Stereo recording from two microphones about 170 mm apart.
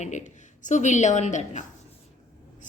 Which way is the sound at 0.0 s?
45° left (ahead or behind).